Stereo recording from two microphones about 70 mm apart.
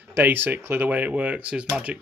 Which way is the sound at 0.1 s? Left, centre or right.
Right.